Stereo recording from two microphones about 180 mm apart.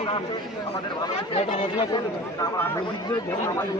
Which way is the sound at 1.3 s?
35° left (ahead or behind).